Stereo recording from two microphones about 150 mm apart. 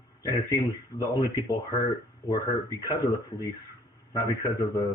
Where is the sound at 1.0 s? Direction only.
25° left (ahead or behind).